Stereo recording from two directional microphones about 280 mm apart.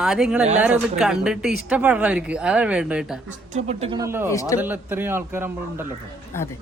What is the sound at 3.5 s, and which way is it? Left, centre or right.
Speech, right.